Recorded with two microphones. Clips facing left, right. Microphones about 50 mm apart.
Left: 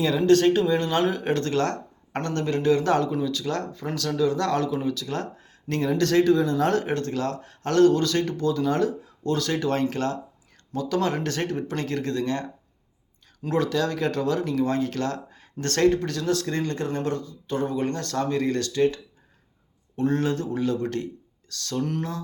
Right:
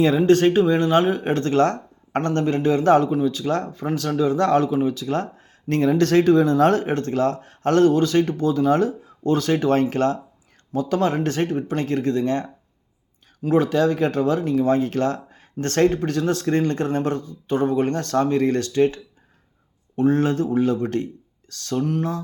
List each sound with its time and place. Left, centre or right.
0.3 s speech: right
13.5 s speech: right
20.0 s speech: right
21.8 s speech: centre